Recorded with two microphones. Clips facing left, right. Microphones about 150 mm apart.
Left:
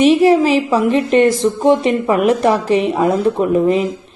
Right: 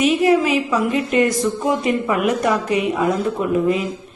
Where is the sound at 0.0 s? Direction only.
30° left (ahead or behind).